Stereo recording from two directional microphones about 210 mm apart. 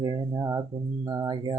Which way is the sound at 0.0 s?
20° right (ahead or behind).